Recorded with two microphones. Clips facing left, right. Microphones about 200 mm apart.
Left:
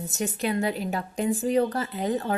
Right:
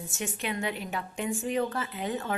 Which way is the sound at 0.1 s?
35° left (ahead or behind).